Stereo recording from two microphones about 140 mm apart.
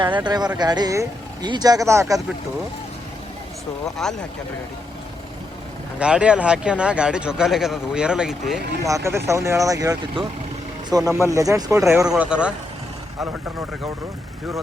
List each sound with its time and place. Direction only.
0.0 s speech: 30° right (ahead or behind)
4.0 s speech: 5° left (ahead or behind)
6.0 s a man's voice: 10° right (ahead or behind)
8.8 s speech: 20° right (ahead or behind)
12.0 s a man's voice: 5° right (ahead or behind)